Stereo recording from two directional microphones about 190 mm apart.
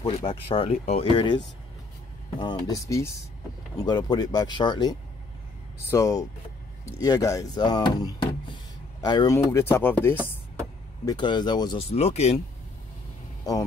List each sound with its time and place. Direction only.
0.0 s speech: 25° left (ahead or behind); by 10.3 s 10° left (ahead or behind)
11.1 s speech: 25° left (ahead or behind)
11.9 s speech: 35° left (ahead or behind)